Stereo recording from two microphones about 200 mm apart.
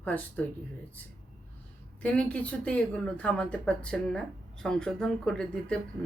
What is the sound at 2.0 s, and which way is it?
Speech, 5° left (ahead or behind).